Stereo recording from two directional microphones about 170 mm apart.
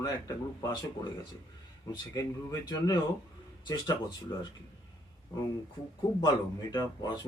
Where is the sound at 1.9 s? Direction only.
20° left (ahead or behind).